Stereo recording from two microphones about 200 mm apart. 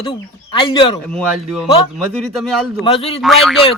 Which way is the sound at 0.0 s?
25° left (ahead or behind).